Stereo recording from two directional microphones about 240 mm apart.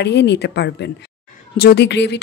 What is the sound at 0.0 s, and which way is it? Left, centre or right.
Speech, left.